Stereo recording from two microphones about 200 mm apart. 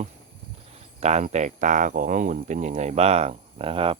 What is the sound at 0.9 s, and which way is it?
Speech, 35° right (ahead or behind).